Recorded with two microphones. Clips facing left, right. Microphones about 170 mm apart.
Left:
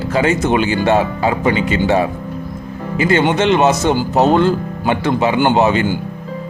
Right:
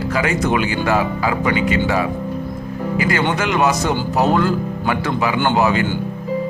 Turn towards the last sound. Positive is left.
turn(degrees=25)  # may be behind; listen again after turning